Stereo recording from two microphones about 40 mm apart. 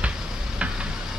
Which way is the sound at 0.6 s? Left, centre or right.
Right.